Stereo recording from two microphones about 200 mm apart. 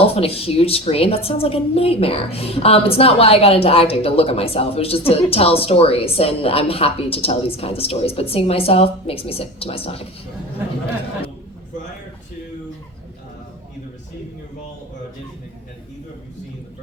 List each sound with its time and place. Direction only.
0.0 s a woman's voice: 30° left (ahead or behind)